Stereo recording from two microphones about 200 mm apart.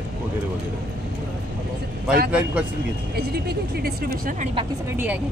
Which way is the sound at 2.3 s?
5° right (ahead or behind).